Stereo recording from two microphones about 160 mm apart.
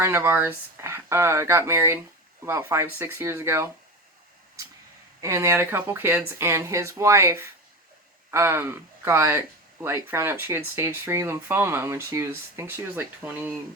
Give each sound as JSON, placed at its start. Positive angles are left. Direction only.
{"t": 0.0, "sound": "speech", "side_deg": -15}
{"t": 5.2, "sound": "speech", "side_deg": -20}